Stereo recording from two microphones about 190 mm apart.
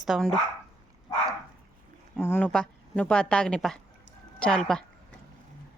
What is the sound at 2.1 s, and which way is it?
Speech, 10° left (ahead or behind).